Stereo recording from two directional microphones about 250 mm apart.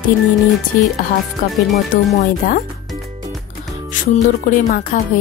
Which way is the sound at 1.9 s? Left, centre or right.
Left.